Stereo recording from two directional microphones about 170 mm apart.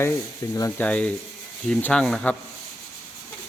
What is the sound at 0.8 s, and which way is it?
Sanding, 10° left (ahead or behind).